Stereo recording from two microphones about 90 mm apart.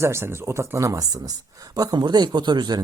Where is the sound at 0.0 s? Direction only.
30° right (ahead or behind).